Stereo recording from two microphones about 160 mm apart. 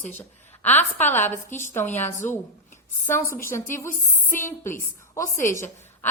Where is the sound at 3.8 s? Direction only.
15° left (ahead or behind).